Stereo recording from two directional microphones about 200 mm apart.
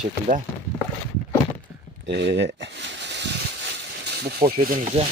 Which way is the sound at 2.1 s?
60° right (ahead or behind).